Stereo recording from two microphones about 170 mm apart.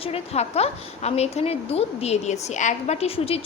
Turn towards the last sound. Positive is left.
turn(degrees=35)  # may be behind; listen again after turning